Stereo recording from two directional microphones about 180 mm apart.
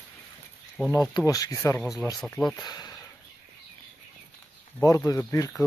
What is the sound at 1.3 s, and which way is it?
Speech, 20° left (ahead or behind).